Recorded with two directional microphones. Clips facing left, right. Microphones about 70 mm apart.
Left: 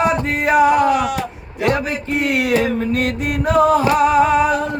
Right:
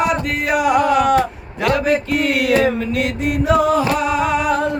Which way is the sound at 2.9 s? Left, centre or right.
Left.